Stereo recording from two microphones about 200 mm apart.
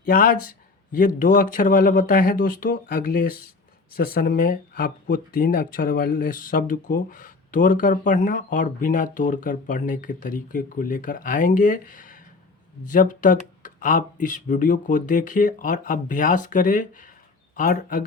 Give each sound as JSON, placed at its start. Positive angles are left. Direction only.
{"t": 0.0, "sound": "speech", "side_deg": 45}